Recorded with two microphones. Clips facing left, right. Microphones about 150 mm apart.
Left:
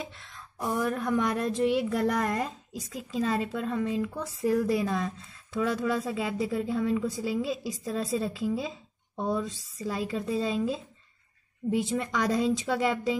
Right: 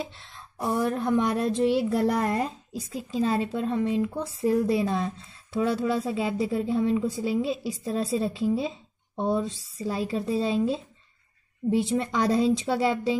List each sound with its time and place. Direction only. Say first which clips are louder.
0.0 s speech: right 4 dB; 30° right (ahead or behind)